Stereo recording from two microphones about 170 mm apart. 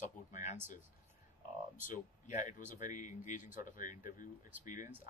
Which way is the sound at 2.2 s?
50° left (ahead or behind).